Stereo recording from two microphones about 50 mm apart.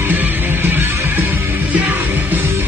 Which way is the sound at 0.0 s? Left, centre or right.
Right.